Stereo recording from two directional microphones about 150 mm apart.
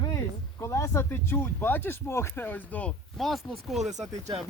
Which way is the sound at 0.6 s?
20° left (ahead or behind).